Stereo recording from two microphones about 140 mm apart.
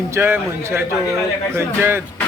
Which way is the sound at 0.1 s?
15° right (ahead or behind).